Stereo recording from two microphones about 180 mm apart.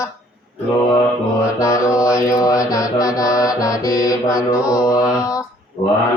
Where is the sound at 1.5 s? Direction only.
20° left (ahead or behind).